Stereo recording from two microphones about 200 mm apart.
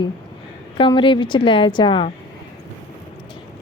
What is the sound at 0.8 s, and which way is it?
Speech, 25° left (ahead or behind).